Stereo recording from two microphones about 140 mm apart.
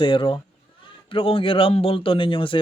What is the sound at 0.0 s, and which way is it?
Speech, 40° left (ahead or behind).